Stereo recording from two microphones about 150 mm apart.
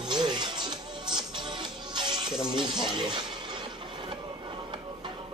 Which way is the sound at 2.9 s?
30° right (ahead or behind).